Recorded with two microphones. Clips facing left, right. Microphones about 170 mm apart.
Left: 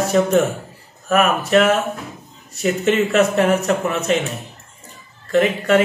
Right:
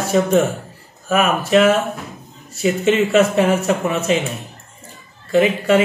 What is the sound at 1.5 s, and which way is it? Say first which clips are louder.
Speech: right 4 dB; centre (ahead or behind).